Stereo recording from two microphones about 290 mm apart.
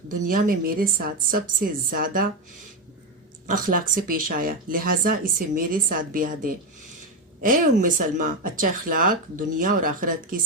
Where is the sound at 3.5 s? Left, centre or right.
Right.